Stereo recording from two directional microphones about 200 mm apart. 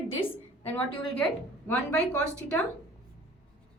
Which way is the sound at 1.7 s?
5° left (ahead or behind).